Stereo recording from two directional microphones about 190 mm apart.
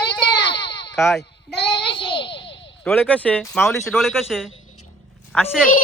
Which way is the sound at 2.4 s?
70° left (ahead or behind).